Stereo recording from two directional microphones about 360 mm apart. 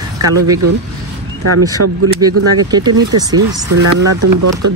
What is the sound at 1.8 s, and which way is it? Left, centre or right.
Speech, right.